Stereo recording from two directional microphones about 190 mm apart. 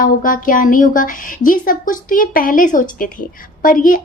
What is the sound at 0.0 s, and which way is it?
A woman's voice, 45° left (ahead or behind).